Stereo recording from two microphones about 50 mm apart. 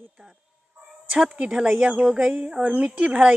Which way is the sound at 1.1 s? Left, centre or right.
Right.